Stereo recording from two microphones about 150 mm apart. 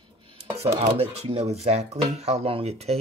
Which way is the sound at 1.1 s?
40° right (ahead or behind).